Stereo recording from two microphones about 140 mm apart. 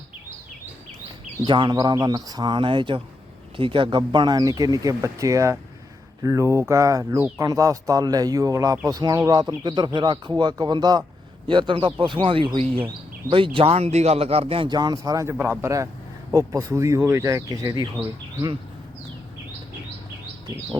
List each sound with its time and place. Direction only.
1.5 s speech: 35° right (ahead or behind)